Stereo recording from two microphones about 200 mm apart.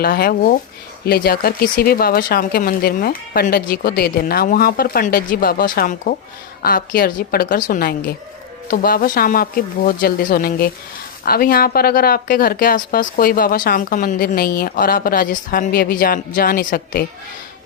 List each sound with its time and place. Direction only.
0.0 s speech: 50° left (ahead or behind)